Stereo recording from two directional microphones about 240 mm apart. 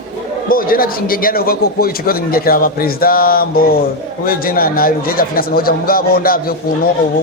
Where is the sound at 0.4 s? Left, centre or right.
Left.